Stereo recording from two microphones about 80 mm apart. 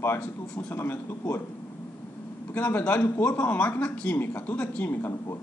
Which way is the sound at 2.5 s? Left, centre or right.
Left.